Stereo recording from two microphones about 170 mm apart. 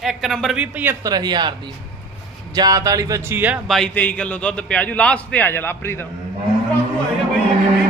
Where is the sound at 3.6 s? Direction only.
5° left (ahead or behind).